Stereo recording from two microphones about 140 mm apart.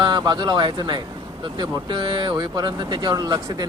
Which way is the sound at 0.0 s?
30° right (ahead or behind).